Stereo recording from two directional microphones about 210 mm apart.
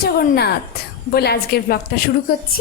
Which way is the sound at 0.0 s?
50° left (ahead or behind).